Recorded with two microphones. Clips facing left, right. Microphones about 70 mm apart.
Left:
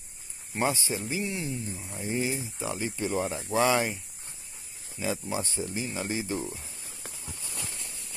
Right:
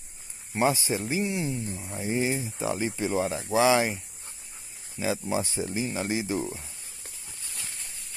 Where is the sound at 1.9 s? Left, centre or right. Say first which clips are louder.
Right 3 dB; centre.